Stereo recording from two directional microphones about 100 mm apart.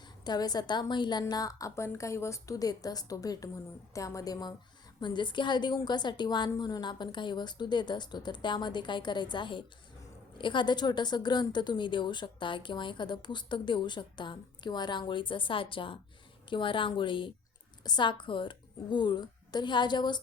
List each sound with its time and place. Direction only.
0.3 s a woman's voice: 45° left (ahead or behind)
1.3 s a woman's voice: 35° left (ahead or behind)